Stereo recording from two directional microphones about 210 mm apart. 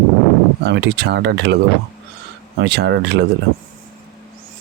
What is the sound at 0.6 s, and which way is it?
Speech, 50° right (ahead or behind).